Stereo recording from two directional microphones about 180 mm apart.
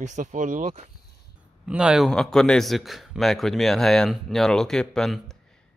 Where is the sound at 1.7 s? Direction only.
5° right (ahead or behind).